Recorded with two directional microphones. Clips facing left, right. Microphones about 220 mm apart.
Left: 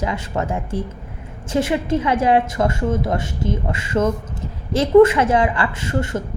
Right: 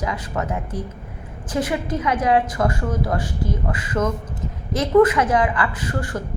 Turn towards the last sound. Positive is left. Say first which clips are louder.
# left 3 dB
turn(degrees=25)  # may be behind; listen again after turning